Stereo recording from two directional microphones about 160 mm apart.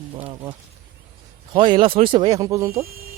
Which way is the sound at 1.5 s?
30° right (ahead or behind).